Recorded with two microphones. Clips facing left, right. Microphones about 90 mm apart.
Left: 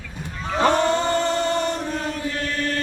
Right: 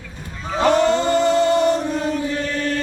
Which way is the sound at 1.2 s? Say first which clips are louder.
Right 6 dB; 10° right (ahead or behind).